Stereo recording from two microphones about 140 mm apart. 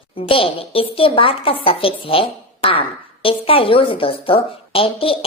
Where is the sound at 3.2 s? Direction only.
40° left (ahead or behind).